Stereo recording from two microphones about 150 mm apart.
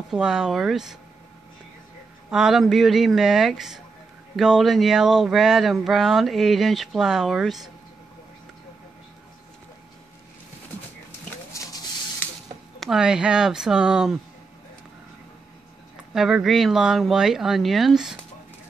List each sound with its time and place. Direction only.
0.1 s speech: 5° right (ahead or behind)
2.3 s speech: centre (ahead or behind)
11.5 s a sound: 20° left (ahead or behind)
12.8 s speech: 5° right (ahead or behind)
16.1 s speech: 5° right (ahead or behind)